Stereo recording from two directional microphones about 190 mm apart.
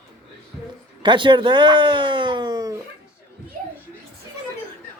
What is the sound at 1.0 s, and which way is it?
Speech, 25° right (ahead or behind).